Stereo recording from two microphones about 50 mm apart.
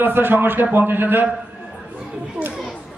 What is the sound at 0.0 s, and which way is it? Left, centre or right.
A man's voice, right.